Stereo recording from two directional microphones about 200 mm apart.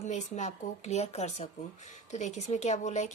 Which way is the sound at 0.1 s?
35° left (ahead or behind).